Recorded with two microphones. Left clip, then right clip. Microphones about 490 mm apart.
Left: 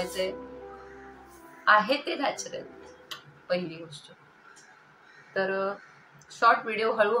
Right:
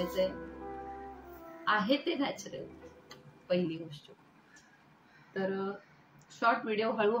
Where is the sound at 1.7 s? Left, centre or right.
Right.